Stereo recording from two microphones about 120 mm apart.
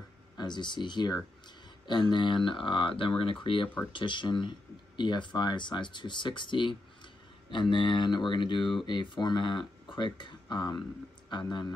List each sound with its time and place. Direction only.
0.4 s speech: 40° left (ahead or behind)